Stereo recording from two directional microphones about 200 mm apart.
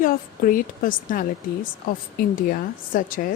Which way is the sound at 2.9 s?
45° left (ahead or behind).